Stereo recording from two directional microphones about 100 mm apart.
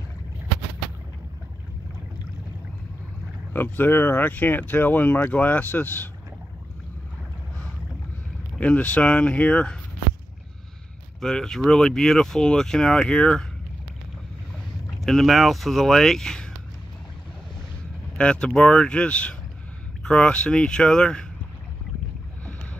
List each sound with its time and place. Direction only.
3.5 s speech: 20° left (ahead or behind)
8.5 s speech: 15° left (ahead or behind)
11.1 s speech: 5° left (ahead or behind)
14.9 s speech: 5° left (ahead or behind)
18.1 s speech: 10° left (ahead or behind)